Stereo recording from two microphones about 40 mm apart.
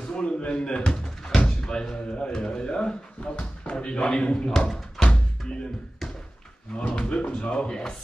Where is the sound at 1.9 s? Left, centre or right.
Left.